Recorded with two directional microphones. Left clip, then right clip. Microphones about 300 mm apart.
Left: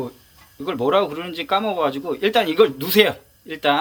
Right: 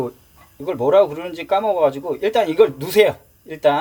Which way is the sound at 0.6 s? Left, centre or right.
Centre.